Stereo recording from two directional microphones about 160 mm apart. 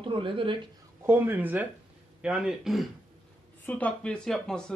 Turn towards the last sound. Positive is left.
turn(degrees=5)  # may be behind; listen again after turning